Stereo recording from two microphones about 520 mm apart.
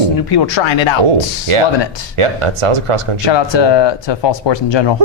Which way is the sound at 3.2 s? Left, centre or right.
Left.